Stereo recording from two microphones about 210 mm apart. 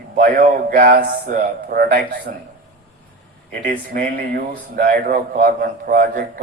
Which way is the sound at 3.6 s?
40° right (ahead or behind).